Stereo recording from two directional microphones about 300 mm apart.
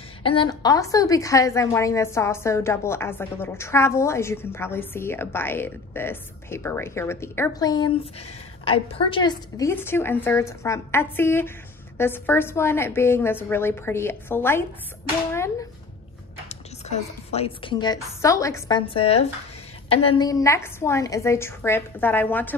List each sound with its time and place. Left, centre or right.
0.2 s a woman's voice: centre
16.4 s a woman's voice: left; by 22.6 s centre